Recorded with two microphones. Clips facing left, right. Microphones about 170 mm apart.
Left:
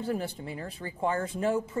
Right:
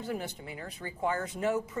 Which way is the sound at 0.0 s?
30° left (ahead or behind).